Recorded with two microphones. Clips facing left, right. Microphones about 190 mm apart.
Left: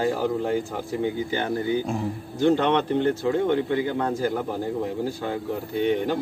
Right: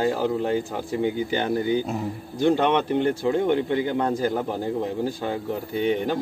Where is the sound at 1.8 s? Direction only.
10° right (ahead or behind).